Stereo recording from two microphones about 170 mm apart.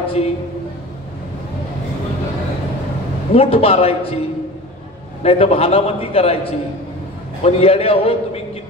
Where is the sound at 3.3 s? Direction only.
35° left (ahead or behind).